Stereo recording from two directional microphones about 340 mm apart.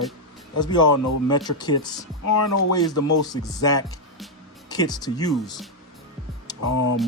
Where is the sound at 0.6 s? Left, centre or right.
Centre.